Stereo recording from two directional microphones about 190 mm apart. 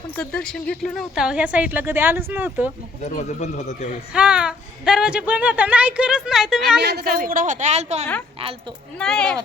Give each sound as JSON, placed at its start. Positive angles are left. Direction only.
{"t": 0.2, "sound": "a woman's voice", "side_deg": 5}
{"t": 3.0, "sound": "speech", "side_deg": 40}
{"t": 4.1, "sound": "speech", "side_deg": -5}
{"t": 6.7, "sound": "a woman's voice", "side_deg": -60}
{"t": 7.2, "sound": "speech", "side_deg": -45}
{"t": 9.0, "sound": "speech", "side_deg": 5}